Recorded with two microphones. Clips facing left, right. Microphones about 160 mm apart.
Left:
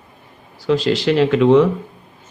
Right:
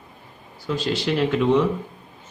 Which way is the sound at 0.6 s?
90° left.